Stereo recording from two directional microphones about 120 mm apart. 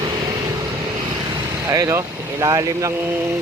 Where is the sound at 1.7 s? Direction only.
25° right (ahead or behind).